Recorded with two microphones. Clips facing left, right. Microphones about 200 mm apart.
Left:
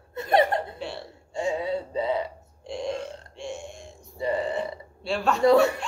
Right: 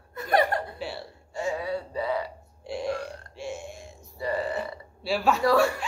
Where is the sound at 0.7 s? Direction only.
Centre (ahead or behind).